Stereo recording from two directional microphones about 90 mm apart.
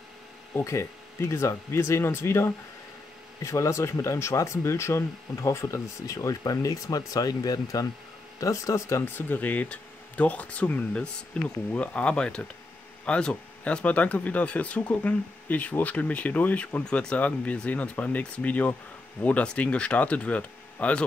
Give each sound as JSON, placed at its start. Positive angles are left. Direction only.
{"t": 0.7, "sound": "speech", "side_deg": 30}
{"t": 9.0, "sound": "speech", "side_deg": 20}